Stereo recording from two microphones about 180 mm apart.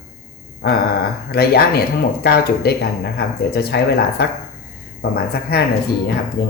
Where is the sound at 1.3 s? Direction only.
60° left (ahead or behind).